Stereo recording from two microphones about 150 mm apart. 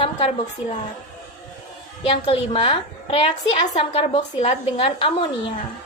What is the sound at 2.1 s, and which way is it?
A woman's voice, 40° left (ahead or behind).